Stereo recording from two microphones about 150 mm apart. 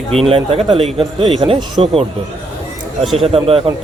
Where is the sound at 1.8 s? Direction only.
40° right (ahead or behind).